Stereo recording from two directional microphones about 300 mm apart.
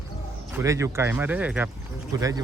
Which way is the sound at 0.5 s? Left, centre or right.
Centre.